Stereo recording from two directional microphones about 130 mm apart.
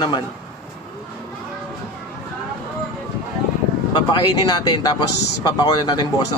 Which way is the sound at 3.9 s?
35° left (ahead or behind).